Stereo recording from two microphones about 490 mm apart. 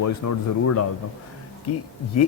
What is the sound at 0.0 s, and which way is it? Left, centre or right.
Speech, left.